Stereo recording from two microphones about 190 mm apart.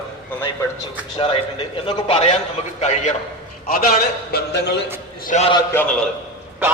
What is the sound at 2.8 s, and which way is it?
Speech, 35° left (ahead or behind).